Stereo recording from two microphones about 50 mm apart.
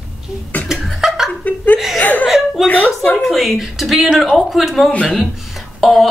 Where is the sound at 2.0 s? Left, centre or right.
Left.